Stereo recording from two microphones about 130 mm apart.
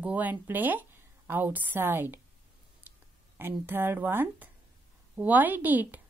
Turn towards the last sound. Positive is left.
turn(degrees=-15)  # may be behind; listen again after turning